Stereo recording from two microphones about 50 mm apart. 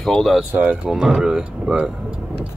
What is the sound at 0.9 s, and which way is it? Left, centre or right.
Speech, centre.